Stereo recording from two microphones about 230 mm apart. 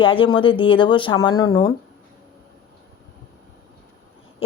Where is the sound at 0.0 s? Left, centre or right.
Left.